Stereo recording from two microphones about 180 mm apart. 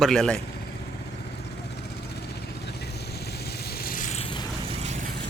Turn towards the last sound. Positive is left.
turn(degrees=45)  # may be behind; listen again after turning